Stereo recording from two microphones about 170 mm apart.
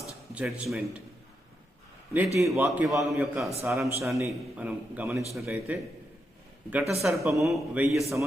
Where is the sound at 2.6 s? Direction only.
Centre (ahead or behind).